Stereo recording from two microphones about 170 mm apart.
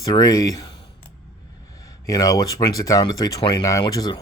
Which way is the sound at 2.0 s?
20° left (ahead or behind).